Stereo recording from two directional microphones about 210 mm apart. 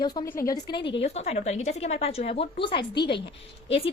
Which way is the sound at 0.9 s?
30° left (ahead or behind).